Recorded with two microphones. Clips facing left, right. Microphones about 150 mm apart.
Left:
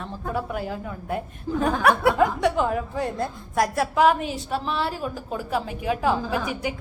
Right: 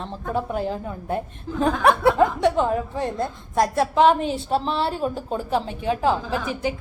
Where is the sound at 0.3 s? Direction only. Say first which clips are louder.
Right 4 dB; 25° right (ahead or behind).